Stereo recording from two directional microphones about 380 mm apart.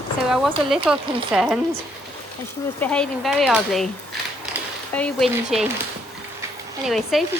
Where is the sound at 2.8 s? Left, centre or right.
Centre.